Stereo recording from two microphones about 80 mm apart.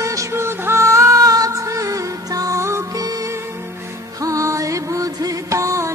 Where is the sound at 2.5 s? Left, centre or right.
Right.